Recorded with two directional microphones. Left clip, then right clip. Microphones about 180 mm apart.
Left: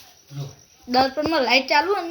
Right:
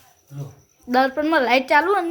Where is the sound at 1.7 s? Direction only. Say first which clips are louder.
Right 3 dB; 10° right (ahead or behind).